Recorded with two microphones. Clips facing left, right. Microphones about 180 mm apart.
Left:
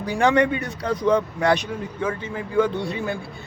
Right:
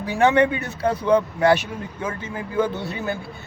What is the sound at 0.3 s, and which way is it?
Speech, 25° right (ahead or behind).